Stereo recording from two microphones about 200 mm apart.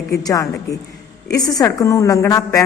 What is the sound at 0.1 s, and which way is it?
A man's voice, 15° left (ahead or behind).